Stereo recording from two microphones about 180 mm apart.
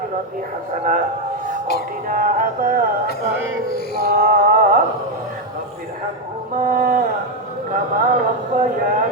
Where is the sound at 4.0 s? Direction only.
55° right (ahead or behind).